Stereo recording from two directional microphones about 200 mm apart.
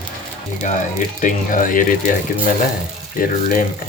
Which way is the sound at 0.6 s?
40° left (ahead or behind).